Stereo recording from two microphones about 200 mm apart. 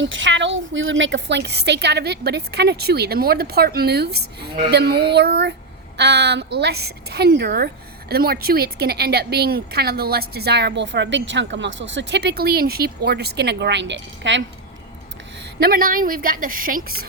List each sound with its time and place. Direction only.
0.0 s a woman's voice: 70° right (ahead or behind)
15.6 s speech: 45° right (ahead or behind)